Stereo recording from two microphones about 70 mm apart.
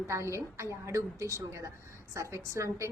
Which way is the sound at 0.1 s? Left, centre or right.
Right.